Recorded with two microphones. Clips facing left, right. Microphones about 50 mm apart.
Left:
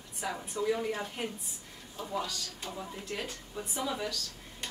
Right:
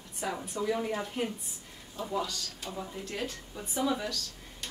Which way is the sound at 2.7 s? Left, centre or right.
Centre.